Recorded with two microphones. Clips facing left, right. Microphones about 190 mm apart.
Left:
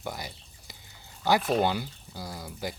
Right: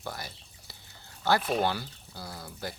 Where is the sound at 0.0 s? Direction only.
15° left (ahead or behind).